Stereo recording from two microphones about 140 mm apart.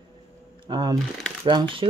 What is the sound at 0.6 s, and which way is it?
Speech, 30° right (ahead or behind).